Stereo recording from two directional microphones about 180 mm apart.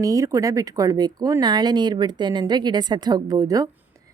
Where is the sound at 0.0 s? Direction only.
20° right (ahead or behind).